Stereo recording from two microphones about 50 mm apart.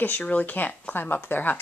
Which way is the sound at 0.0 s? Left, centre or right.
Left.